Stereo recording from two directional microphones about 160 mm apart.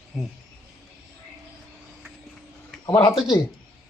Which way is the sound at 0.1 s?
Centre (ahead or behind).